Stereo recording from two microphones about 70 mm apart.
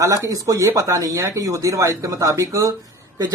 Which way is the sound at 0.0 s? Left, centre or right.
Right.